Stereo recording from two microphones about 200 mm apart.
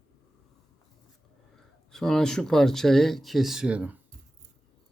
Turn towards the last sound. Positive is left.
turn(degrees=-5)  # may be behind; listen again after turning